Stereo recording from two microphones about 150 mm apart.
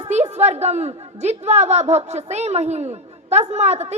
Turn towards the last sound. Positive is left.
turn(degrees=-45)  # may be behind; listen again after turning